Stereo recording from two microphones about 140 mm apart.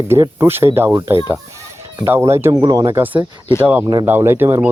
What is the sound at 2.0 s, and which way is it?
Speech, 20° right (ahead or behind).